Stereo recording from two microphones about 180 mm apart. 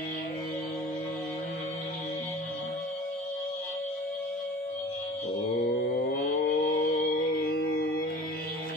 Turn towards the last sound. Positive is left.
turn(degrees=60)  # may be behind; listen again after turning